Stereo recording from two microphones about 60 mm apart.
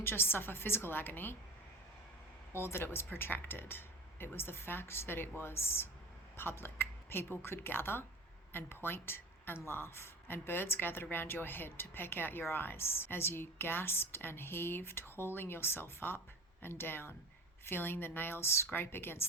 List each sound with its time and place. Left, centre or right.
0.0 s a woman's voice: left
2.6 s a woman's voice: left
18.7 s a woman's voice: left